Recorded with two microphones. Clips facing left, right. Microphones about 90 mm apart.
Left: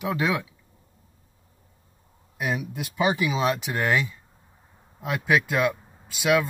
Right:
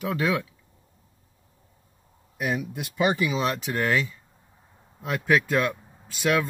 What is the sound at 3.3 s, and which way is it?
Speech, 15° left (ahead or behind).